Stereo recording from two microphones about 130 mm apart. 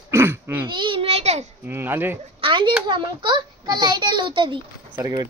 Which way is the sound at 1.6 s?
15° right (ahead or behind).